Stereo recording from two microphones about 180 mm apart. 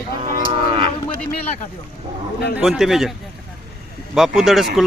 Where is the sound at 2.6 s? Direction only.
Centre (ahead or behind).